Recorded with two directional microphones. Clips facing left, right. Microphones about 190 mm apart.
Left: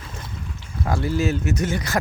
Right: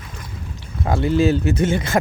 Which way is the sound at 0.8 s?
25° right (ahead or behind).